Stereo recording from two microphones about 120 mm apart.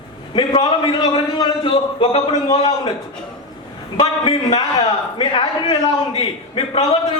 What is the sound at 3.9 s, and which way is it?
Speech, 50° left (ahead or behind).